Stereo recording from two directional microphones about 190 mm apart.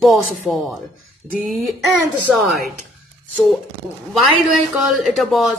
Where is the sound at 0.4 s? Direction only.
Centre (ahead or behind).